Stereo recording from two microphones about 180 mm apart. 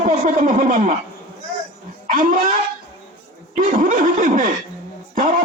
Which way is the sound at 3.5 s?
45° right (ahead or behind).